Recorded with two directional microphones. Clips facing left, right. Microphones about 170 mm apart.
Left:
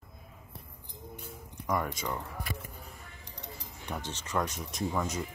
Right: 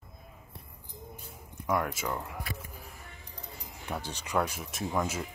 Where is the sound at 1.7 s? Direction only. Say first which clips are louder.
Right 2 dB; 5° right (ahead or behind).